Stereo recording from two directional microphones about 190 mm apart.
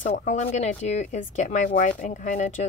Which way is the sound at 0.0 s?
40° left (ahead or behind).